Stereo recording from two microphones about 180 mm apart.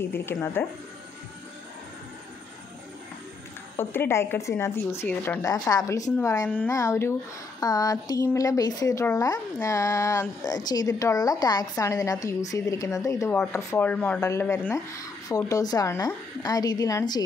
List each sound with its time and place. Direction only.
0.0 s speech: 10° left (ahead or behind)
3.7 s speech: 10° left (ahead or behind)
6.4 s speech: 10° left (ahead or behind)